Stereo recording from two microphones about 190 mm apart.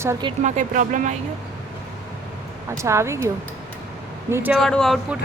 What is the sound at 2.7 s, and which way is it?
Speech, 15° right (ahead or behind).